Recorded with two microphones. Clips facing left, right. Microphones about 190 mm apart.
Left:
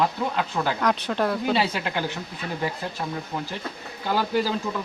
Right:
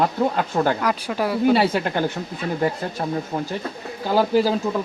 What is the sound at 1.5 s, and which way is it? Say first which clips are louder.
Speech: right 6 dB; 50° right (ahead or behind).